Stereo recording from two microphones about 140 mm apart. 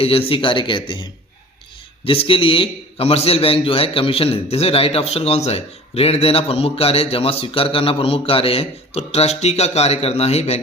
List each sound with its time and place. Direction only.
0.0 s a man's voice: 45° left (ahead or behind)